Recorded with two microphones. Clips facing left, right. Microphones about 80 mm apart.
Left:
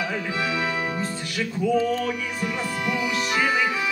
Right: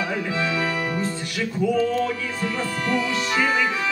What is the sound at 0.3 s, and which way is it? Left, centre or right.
Music, centre.